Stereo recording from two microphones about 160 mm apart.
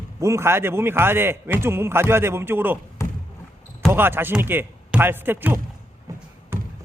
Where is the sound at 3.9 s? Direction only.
15° right (ahead or behind).